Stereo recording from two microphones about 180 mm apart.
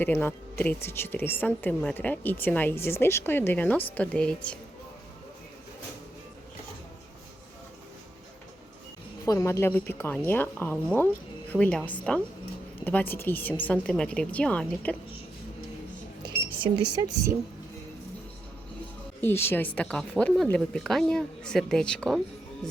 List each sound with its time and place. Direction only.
0.0 s a woman's voice: 10° left (ahead or behind)
9.2 s a woman's voice: 15° left (ahead or behind)
16.9 s a woman's voice: 20° right (ahead or behind)
19.2 s a woman's voice: 15° left (ahead or behind)